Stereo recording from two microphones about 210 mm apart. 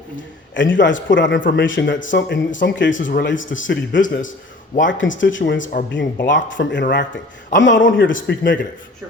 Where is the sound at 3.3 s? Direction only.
65° left (ahead or behind).